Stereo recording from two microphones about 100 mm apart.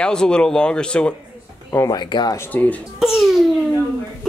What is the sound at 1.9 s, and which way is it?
Speech, 50° left (ahead or behind).